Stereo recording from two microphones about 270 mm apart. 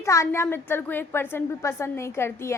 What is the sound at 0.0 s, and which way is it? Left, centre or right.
A woman's voice, centre.